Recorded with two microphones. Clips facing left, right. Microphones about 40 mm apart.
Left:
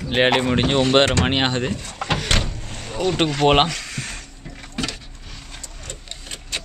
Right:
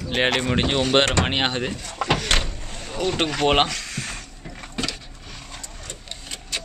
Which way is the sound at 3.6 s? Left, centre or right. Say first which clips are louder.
Left 1 dB; centre.